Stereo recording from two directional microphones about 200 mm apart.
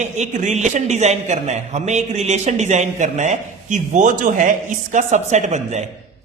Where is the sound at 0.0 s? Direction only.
35° right (ahead or behind).